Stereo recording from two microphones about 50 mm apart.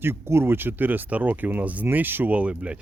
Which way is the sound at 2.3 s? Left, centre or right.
Right.